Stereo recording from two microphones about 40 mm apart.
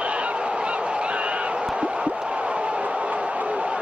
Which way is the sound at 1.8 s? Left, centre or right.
Right.